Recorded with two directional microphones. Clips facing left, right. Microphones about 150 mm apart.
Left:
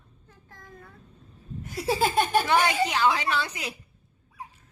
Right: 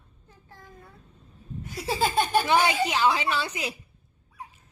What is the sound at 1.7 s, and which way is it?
Laughter, centre (ahead or behind).